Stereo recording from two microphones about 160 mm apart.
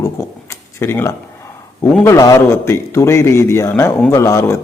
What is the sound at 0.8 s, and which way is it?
Speech, 15° left (ahead or behind).